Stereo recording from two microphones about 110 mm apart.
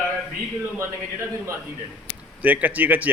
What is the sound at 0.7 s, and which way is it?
Speech, 25° right (ahead or behind).